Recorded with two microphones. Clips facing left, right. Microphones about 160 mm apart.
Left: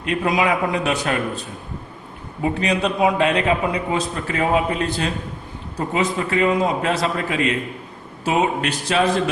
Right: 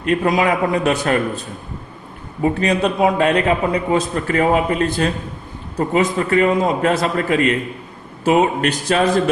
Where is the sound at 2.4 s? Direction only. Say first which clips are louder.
Right 3 dB; 45° right (ahead or behind).